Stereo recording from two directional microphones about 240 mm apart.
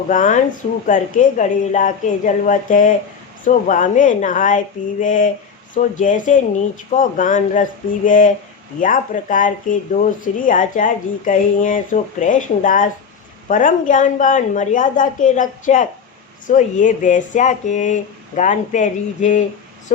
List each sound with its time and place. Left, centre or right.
0.1 s speech: left